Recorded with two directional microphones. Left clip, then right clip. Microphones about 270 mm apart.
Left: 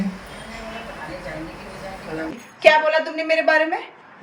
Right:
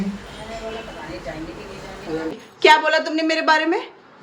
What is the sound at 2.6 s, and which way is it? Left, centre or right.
A woman's voice, centre.